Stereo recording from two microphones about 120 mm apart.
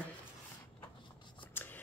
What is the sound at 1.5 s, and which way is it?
Shuffling cards, 15° left (ahead or behind).